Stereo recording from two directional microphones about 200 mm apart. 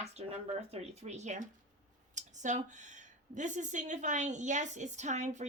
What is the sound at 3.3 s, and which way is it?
Speech, 35° right (ahead or behind).